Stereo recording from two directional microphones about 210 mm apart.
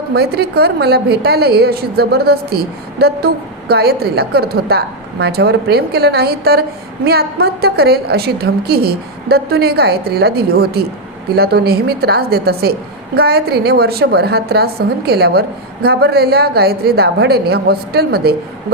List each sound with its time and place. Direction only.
0.1 s a woman's voice: 50° right (ahead or behind)